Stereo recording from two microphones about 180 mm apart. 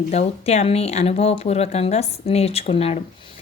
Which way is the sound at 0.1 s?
35° left (ahead or behind).